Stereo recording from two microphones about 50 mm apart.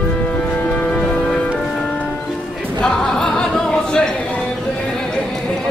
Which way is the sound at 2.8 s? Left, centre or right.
Centre.